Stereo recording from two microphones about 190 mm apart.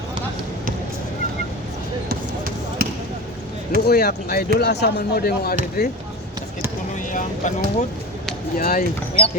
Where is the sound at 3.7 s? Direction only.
55° left (ahead or behind).